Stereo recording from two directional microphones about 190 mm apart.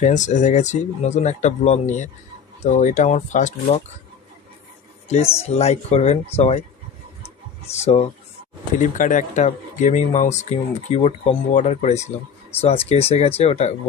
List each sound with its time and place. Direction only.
0.0 s speech: 40° left (ahead or behind)
5.4 s speech: 35° left (ahead or behind)
7.7 s speech: 35° left (ahead or behind)